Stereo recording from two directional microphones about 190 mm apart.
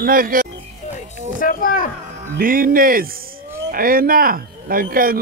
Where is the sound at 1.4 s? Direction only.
45° left (ahead or behind).